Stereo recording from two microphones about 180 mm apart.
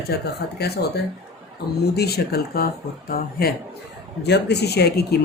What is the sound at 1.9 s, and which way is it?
Speech, 60° left (ahead or behind).